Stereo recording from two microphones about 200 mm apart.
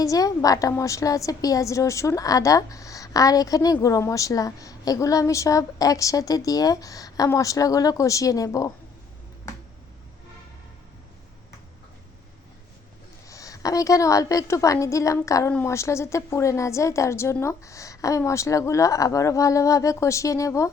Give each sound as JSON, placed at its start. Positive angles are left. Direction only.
{"t": 0.0, "sound": "a woman's voice", "side_deg": 15}
{"t": 13.2, "sound": "a woman's voice", "side_deg": 15}